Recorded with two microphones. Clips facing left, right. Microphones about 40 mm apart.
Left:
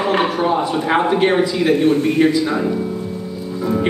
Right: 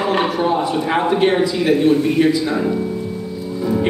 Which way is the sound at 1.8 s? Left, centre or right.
Left.